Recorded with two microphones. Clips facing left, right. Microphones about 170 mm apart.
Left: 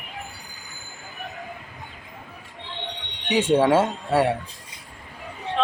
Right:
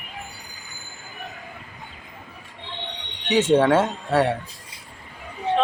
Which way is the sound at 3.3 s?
10° left (ahead or behind).